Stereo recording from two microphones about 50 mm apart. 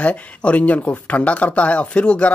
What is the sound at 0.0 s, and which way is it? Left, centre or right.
Speech, left.